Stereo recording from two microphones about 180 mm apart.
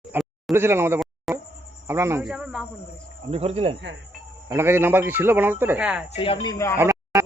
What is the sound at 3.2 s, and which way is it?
Speech, 35° right (ahead or behind).